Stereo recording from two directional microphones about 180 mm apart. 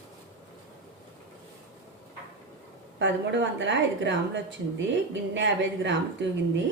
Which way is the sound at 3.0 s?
85° right.